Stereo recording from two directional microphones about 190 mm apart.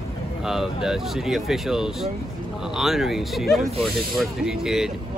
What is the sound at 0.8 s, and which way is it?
Speech, centre (ahead or behind).